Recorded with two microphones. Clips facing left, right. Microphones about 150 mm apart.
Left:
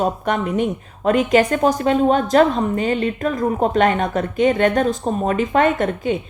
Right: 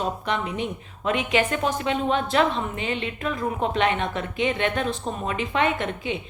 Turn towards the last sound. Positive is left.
turn(degrees=45)  # may be behind; listen again after turning